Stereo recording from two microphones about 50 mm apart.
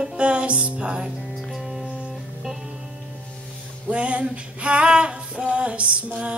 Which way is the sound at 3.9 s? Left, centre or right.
Right.